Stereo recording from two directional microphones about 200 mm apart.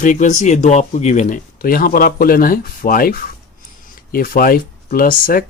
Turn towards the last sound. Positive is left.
turn(degrees=45)  # may be behind; listen again after turning